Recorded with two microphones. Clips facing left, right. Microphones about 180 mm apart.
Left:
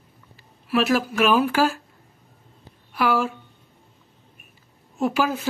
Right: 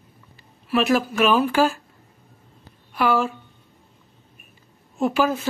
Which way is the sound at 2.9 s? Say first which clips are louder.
Right 1 dB; 10° left (ahead or behind).